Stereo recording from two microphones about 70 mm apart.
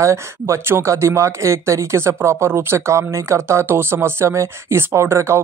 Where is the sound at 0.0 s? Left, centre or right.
Right.